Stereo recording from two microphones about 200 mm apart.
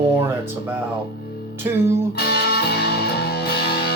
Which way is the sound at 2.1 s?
50° left (ahead or behind).